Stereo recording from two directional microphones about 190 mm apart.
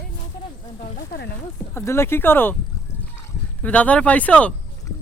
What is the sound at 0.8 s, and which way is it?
Speech, 50° left (ahead or behind).